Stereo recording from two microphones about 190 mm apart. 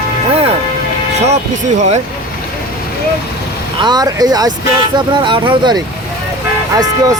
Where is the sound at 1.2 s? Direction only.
35° right (ahead or behind).